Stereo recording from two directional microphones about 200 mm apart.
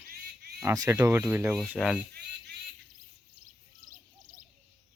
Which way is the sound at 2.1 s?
55° right (ahead or behind).